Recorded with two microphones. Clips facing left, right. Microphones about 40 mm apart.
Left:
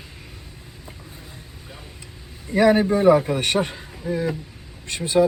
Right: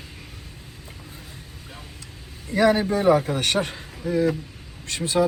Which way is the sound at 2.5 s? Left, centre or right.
Centre.